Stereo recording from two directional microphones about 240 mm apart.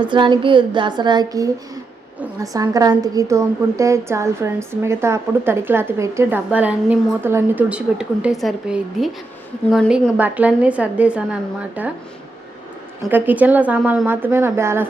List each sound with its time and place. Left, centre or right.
0.0 s a woman's voice: centre
13.1 s a woman's voice: centre